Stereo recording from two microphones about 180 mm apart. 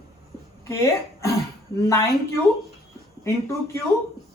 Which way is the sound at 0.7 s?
15° left (ahead or behind).